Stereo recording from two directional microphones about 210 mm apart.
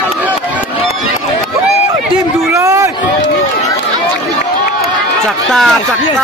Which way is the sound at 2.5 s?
15° right (ahead or behind).